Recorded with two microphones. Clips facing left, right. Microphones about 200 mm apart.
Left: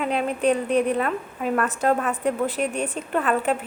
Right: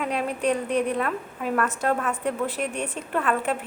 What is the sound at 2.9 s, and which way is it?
Speech, centre (ahead or behind).